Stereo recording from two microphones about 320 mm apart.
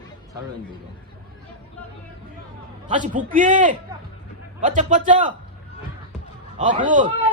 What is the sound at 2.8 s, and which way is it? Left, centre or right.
A man's voice, right.